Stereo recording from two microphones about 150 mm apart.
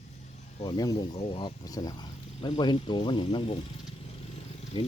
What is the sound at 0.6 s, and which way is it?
Speech, 30° left (ahead or behind).